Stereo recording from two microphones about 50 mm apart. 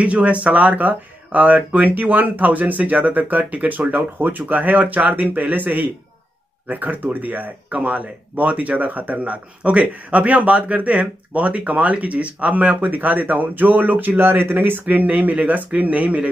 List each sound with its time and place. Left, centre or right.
0.0 s speech: right